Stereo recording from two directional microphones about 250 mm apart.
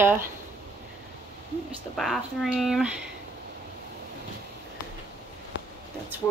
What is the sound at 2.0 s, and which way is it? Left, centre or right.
Speech, centre.